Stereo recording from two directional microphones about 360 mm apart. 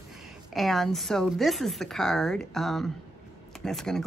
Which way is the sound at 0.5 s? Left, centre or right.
Centre.